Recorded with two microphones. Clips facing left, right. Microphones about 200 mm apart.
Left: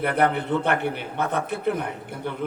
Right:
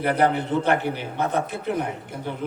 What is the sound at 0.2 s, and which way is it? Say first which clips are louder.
A man's voice: right 1 dB; 60° left (ahead or behind).